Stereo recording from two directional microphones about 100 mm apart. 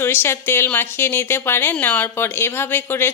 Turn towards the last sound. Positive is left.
turn(degrees=20)  # may be behind; listen again after turning